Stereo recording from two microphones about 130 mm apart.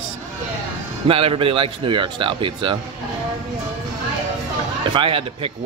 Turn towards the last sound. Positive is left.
turn(degrees=-40)  # may be behind; listen again after turning